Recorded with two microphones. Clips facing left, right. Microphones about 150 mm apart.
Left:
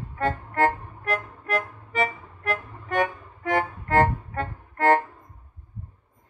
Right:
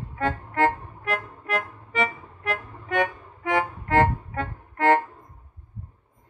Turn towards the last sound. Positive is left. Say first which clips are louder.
# even
turn(degrees=40)  # may be behind; listen again after turning